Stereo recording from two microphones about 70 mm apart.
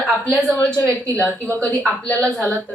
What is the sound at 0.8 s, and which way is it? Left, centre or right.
Speech, right.